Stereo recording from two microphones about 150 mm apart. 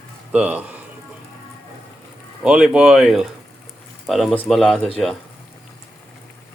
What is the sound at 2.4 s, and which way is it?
Speech, 5° right (ahead or behind).